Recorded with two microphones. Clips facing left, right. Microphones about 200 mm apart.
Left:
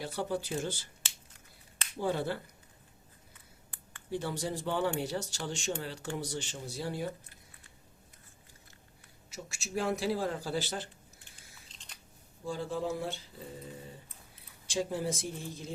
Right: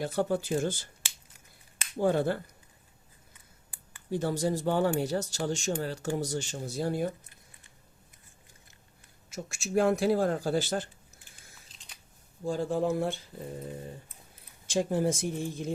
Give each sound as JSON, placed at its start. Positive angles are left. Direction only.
{"t": 0.0, "sound": "speech", "side_deg": -50}
{"t": 2.0, "sound": "speech", "side_deg": -50}
{"t": 4.1, "sound": "speech", "side_deg": -45}
{"t": 9.3, "sound": "speech", "side_deg": -50}
{"t": 11.7, "sound": "scissors", "side_deg": -5}
{"t": 12.5, "sound": "speech", "side_deg": -50}
{"t": 14.7, "sound": "speech", "side_deg": -50}